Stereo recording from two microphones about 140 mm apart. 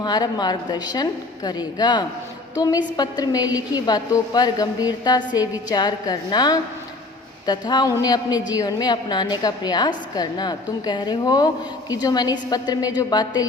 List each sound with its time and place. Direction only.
0.0 s a woman's voice: 30° left (ahead or behind)